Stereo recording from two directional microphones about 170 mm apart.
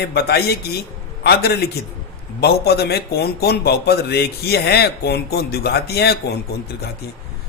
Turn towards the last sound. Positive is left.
turn(degrees=70)  # may be behind; listen again after turning